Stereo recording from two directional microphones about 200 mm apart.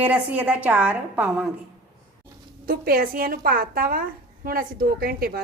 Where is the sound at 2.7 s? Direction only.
45° right (ahead or behind).